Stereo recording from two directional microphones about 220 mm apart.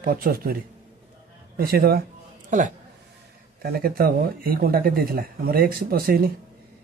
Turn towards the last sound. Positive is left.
turn(degrees=-40)  # may be behind; listen again after turning